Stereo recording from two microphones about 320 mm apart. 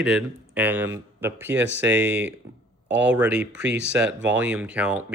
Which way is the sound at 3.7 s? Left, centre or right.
Right.